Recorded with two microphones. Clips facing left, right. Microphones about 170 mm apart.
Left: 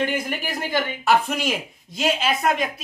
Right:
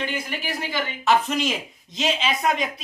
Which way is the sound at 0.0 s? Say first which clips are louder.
Left 4 dB; 50° left (ahead or behind).